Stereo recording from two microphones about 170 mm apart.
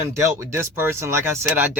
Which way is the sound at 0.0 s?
15° right (ahead or behind).